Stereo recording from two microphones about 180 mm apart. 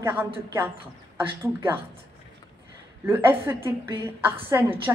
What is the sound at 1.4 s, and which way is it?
Speech, 15° right (ahead or behind).